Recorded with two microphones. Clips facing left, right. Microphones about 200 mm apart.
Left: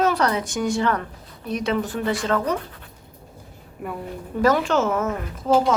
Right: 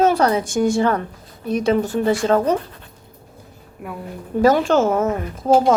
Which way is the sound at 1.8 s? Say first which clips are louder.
Right 6 dB; 25° right (ahead or behind).